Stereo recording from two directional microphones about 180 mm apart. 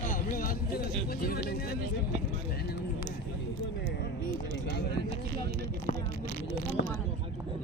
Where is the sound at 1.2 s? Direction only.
60° left (ahead or behind).